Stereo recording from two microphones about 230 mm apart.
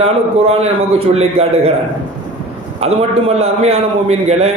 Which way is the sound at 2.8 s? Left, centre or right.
Right.